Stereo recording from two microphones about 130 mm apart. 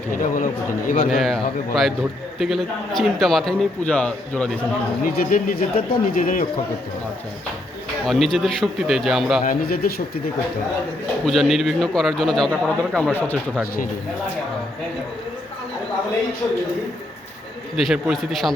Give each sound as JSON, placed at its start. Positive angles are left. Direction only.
{"t": 0.2, "sound": "a man's voice", "side_deg": 90}
{"t": 1.1, "sound": "a man's voice", "side_deg": 0}
{"t": 5.0, "sound": "a man's voice", "side_deg": 90}
{"t": 8.0, "sound": "a man's voice", "side_deg": 0}
{"t": 9.4, "sound": "a man's voice", "side_deg": 90}
{"t": 11.3, "sound": "a man's voice", "side_deg": 0}
{"t": 17.7, "sound": "a man's voice", "side_deg": -5}